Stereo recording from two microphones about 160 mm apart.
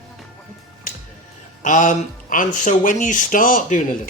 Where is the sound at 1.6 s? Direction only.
50° left (ahead or behind).